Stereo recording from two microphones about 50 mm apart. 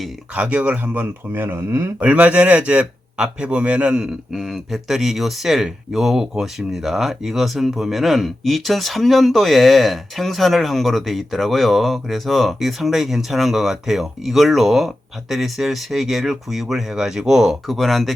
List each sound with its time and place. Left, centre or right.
0.3 s speech: right
1.3 s speech: right
2.0 s speech: right
4.0 s speech: centre
17.7 s speech: centre